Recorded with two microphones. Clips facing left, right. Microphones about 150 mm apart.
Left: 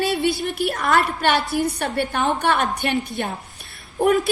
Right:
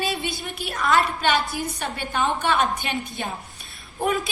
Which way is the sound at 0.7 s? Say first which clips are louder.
Right 2 dB; 55° left (ahead or behind).